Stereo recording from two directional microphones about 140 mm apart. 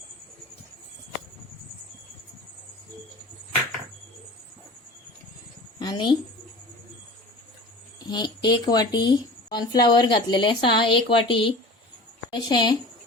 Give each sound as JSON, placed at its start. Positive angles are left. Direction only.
{"t": 5.8, "sound": "a woman's voice", "side_deg": 35}
{"t": 8.1, "sound": "speech", "side_deg": 30}